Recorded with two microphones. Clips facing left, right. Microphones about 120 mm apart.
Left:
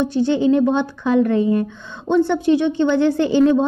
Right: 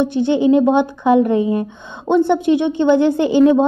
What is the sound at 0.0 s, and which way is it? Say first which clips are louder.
Speech: right 2 dB; 20° right (ahead or behind).